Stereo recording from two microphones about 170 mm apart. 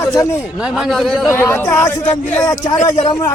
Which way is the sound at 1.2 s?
15° left (ahead or behind).